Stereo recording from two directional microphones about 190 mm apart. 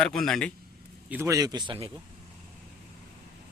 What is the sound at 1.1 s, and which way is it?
Speech, 15° right (ahead or behind).